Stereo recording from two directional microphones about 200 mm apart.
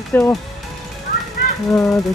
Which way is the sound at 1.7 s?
15° left (ahead or behind).